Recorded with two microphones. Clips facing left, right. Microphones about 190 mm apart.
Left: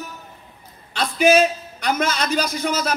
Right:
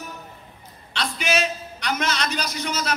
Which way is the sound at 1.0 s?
50° left (ahead or behind).